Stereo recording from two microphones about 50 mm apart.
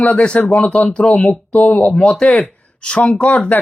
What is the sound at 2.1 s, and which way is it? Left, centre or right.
Speech, centre.